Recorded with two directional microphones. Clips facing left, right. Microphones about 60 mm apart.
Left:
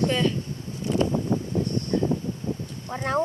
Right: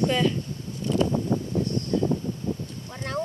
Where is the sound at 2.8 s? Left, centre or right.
Left.